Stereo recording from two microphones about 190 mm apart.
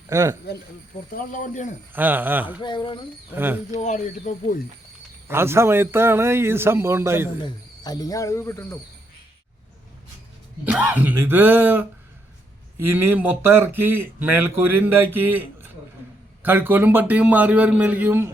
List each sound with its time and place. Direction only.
0.1 s speech: 15° right (ahead or behind)
1.1 s speech: 45° left (ahead or behind)
1.9 s speech: 10° right (ahead or behind)
2.6 s speech: 25° left (ahead or behind)
3.3 s speech: 10° right (ahead or behind)
3.7 s speech: 40° left (ahead or behind)
5.3 s speech: 10° right (ahead or behind)
7.4 s speech: 20° left (ahead or behind)
10.7 s speech: 10° right (ahead or behind)